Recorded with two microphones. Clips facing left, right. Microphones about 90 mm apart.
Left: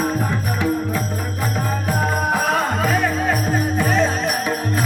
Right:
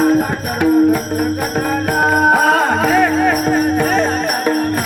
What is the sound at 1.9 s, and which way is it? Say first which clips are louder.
Music: right 8 dB; 70° right (ahead or behind).